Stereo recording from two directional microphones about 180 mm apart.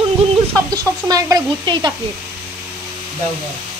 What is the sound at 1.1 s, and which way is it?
Child singing, 20° right (ahead or behind).